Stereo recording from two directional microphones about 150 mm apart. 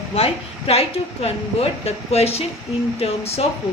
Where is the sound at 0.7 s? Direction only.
40° left (ahead or behind).